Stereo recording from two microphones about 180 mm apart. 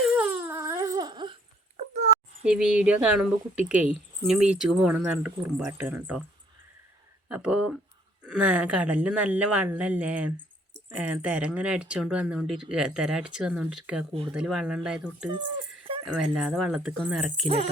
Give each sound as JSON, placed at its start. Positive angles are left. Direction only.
{"t": 0.0, "sound": "dog", "side_deg": -10}
{"t": 1.7, "sound": "a sound", "side_deg": -40}
{"t": 2.4, "sound": "speech", "side_deg": -5}
{"t": 7.3, "sound": "speech", "side_deg": -5}
{"t": 17.4, "sound": "speech", "side_deg": -35}